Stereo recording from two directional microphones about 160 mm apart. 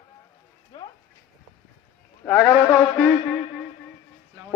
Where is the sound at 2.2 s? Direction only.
15° left (ahead or behind).